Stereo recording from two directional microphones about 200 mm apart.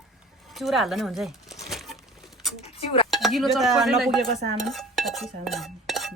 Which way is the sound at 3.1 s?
Centre (ahead or behind).